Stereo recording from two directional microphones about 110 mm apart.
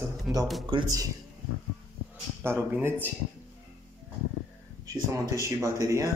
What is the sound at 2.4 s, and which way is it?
Speech, 20° right (ahead or behind).